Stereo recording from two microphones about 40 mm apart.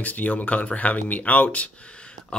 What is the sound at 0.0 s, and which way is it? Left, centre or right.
Speech, left.